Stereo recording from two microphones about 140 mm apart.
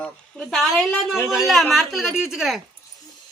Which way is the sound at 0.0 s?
Centre (ahead or behind).